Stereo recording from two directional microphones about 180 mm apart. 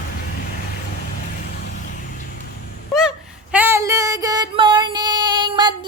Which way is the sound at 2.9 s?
5° right (ahead or behind).